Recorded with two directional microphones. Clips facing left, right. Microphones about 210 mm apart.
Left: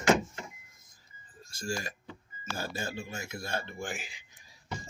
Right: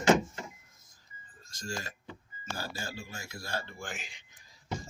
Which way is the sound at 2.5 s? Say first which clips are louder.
Left 4 dB; 20° left (ahead or behind).